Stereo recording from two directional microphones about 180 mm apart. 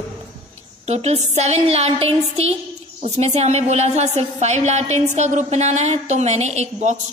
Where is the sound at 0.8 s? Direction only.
35° right (ahead or behind).